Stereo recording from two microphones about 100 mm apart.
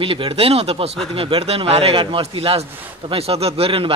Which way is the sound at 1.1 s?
70° right (ahead or behind).